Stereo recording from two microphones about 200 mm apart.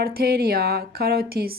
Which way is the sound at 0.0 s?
50° right (ahead or behind).